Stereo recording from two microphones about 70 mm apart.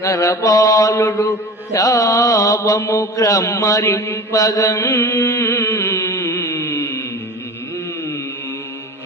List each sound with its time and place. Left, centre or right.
0.0 s mantra: left